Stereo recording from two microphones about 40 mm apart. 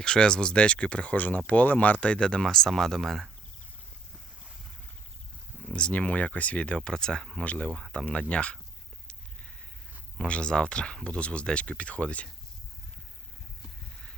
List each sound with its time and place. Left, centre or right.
0.0 s speech: centre; by 2.1 s left
2.1 s speech: left; by 3.2 s centre
5.6 s speech: left
6.7 s speech: centre
7.4 s speech: left
10.2 s speech: left